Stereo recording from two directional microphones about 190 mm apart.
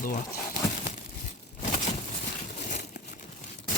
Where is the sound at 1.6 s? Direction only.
40° left (ahead or behind).